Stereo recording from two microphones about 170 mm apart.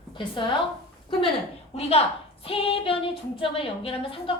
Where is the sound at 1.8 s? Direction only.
35° left (ahead or behind).